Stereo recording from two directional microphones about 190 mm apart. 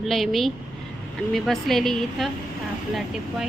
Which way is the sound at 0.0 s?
Centre (ahead or behind).